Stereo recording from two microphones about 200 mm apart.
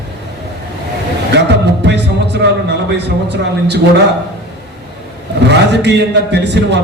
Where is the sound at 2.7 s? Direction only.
60° right (ahead or behind).